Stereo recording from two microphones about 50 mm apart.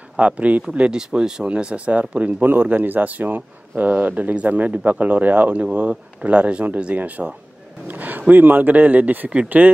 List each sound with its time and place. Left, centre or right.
0.2 s speech: right
0.7 s speech: centre; by 9.7 s right